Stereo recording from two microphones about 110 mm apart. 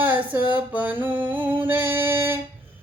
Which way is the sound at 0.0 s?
15° right (ahead or behind).